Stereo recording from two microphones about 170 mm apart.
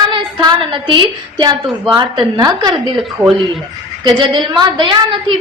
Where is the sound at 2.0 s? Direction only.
25° right (ahead or behind).